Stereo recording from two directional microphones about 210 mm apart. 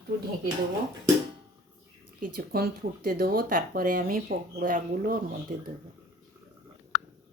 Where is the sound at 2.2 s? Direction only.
45° right (ahead or behind).